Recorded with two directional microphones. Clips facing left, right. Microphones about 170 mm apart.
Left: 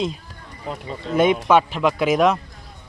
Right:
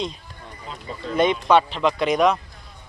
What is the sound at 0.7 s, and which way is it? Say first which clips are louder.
Speech: left 8 dB; 60° left (ahead or behind).